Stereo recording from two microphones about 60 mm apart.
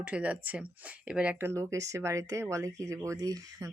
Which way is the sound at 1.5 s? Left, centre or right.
Right.